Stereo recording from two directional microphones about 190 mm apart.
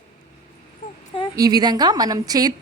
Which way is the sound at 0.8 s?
45° left (ahead or behind).